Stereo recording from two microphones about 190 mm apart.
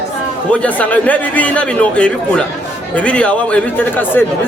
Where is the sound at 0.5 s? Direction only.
5° left (ahead or behind).